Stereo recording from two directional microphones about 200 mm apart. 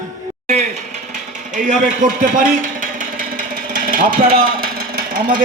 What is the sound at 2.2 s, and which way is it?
Speech, 40° right (ahead or behind).